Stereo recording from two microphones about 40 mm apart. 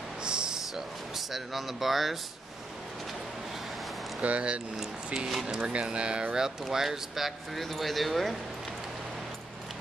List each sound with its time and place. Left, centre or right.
0.2 s a sound: right
1.1 s speech: centre
4.2 s speech: right
4.7 s speech: centre
5.6 s speech: right
6.6 s speech: centre